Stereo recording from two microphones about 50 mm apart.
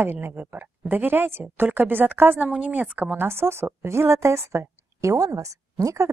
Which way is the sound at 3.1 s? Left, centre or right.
Right.